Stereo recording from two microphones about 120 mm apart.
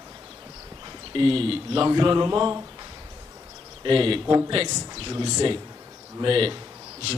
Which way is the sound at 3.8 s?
45° right (ahead or behind).